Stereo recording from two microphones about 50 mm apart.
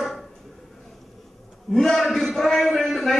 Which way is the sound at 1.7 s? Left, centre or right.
Centre.